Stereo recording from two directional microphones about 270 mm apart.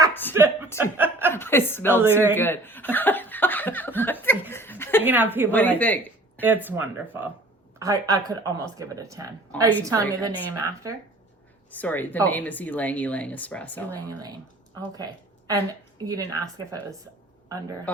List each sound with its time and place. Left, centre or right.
0.1 s a sound: centre
0.3 s a sound: centre
0.8 s speech: centre
1.3 s speech: centre
1.9 s speech: centre
2.3 s speech: centre
5.0 s speech: centre
5.5 s speech: centre
6.4 s speech: centre
11.7 s speech: centre
16.0 s speech: centre
17.9 s speech: centre